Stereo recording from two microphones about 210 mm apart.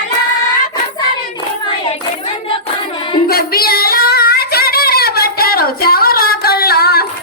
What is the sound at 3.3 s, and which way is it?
Female singing, 45° left (ahead or behind).